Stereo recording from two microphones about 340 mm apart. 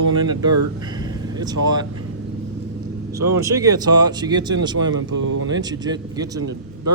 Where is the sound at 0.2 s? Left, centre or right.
Centre.